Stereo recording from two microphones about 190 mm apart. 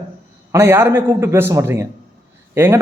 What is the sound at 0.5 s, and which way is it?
A man's voice, 15° right (ahead or behind).